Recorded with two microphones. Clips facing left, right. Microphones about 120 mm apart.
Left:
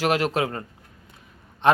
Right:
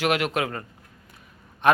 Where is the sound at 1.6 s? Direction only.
25° left (ahead or behind).